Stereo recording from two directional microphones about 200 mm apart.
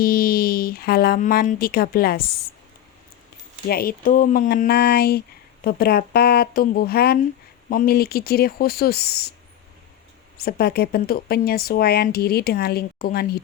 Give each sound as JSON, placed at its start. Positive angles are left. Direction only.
{"t": 0.0, "sound": "speech", "side_deg": 50}
{"t": 3.7, "sound": "speech", "side_deg": 50}
{"t": 10.3, "sound": "speech", "side_deg": 50}